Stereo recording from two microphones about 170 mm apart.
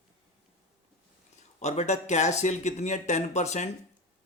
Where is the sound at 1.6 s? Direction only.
40° left (ahead or behind).